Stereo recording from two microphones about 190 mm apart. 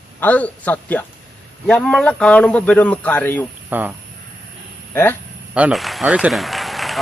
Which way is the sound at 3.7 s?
10° right (ahead or behind).